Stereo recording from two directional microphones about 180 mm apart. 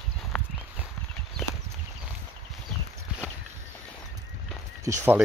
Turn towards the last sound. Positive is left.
turn(degrees=-15)  # may be behind; listen again after turning